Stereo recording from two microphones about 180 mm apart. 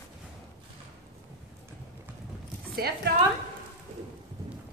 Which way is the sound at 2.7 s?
60° right (ahead or behind).